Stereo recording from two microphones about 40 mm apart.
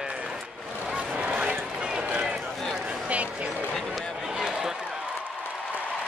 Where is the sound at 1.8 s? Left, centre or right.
Right.